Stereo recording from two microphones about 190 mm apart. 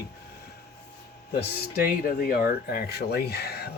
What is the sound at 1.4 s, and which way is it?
Speech, 55° left (ahead or behind).